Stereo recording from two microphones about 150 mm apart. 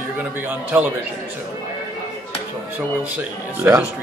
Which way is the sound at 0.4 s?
10° right (ahead or behind).